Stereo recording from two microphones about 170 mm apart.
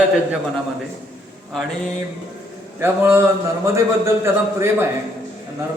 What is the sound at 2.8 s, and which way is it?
A man's voice, 15° right (ahead or behind).